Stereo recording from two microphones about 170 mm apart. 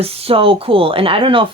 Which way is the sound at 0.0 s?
35° right (ahead or behind).